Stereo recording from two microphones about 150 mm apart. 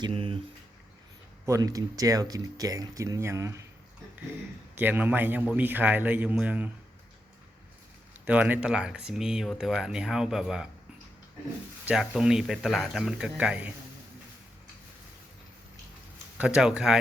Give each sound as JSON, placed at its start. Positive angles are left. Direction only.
{"t": 0.0, "sound": "speech", "side_deg": -35}
{"t": 1.5, "sound": "speech", "side_deg": -20}
{"t": 4.7, "sound": "a man's voice", "side_deg": -15}
{"t": 8.2, "sound": "speech", "side_deg": -10}
{"t": 11.9, "sound": "speech", "side_deg": -5}
{"t": 16.4, "sound": "speech", "side_deg": -5}